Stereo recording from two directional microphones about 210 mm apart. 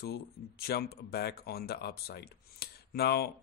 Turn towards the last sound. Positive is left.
turn(degrees=50)  # may be behind; listen again after turning